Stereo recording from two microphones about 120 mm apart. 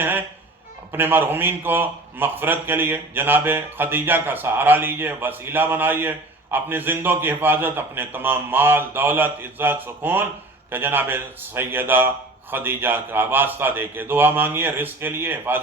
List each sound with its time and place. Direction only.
0.0 s music: 15° right (ahead or behind)
0.9 s a man's voice: 15° right (ahead or behind)